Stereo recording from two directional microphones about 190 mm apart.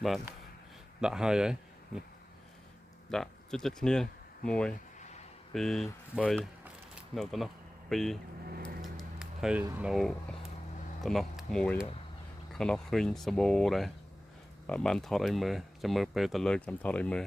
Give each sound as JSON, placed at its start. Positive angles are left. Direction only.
{"t": 1.0, "sound": "speech", "side_deg": -5}
{"t": 3.1, "sound": "speech", "side_deg": 5}
{"t": 4.9, "sound": "a sound", "side_deg": 35}
{"t": 5.5, "sound": "speech", "side_deg": 0}
{"t": 6.9, "sound": "a sound", "side_deg": 0}
{"t": 9.6, "sound": "speech", "side_deg": -5}